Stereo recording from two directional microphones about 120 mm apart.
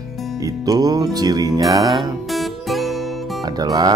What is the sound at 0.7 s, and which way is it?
Speech, 30° right (ahead or behind).